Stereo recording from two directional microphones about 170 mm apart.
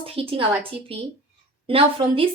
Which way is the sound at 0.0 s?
35° right (ahead or behind).